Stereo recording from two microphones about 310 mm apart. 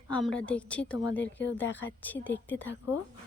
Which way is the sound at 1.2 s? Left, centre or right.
Left.